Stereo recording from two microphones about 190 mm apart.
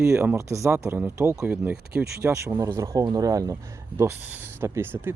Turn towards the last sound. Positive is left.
turn(degrees=-10)  # may be behind; listen again after turning